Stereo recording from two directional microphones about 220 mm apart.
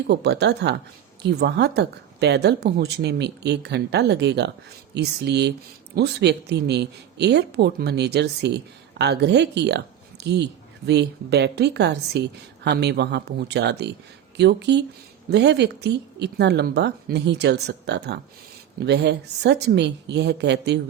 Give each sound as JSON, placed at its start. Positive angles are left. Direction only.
{"t": 0.1, "sound": "speech", "side_deg": -50}